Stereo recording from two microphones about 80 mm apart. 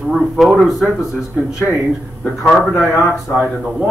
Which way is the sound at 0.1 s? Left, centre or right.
Centre.